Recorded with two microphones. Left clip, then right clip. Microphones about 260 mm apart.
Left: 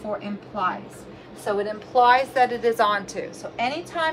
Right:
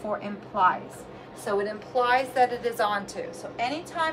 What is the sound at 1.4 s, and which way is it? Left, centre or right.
A woman's voice, centre.